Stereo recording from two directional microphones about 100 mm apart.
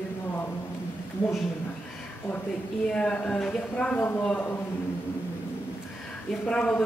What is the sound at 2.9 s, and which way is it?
Speech, 10° left (ahead or behind).